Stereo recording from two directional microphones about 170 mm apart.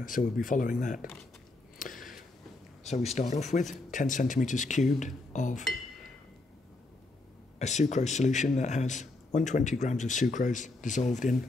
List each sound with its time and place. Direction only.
0.0 s a man's voice: 50° left (ahead or behind)
1.8 s a sound: 50° left (ahead or behind)
2.8 s a man's voice: 40° left (ahead or behind)
7.5 s a man's voice: 45° left (ahead or behind)